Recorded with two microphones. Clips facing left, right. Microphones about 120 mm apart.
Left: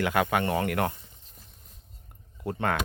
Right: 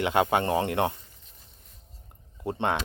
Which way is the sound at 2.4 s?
25° right (ahead or behind).